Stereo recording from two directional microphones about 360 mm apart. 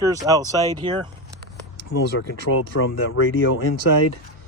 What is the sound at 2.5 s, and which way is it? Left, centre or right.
Speech, left.